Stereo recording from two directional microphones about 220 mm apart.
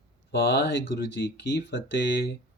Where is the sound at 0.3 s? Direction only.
50° left (ahead or behind).